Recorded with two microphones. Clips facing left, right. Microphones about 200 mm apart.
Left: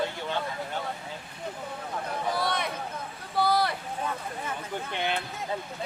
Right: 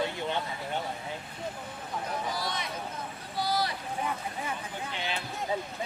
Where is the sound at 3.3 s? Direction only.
60° left (ahead or behind).